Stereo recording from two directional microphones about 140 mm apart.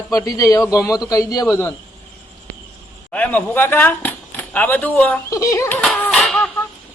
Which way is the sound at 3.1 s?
10° left (ahead or behind).